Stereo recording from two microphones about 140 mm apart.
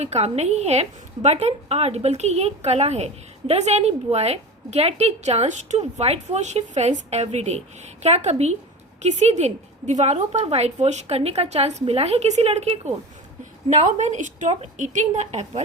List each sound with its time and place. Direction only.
0.0 s a woman's voice: 50° right (ahead or behind)
13.7 s a woman's voice: 60° right (ahead or behind)